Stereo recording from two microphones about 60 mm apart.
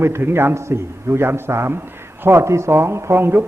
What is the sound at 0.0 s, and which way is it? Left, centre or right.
A man's voice, right.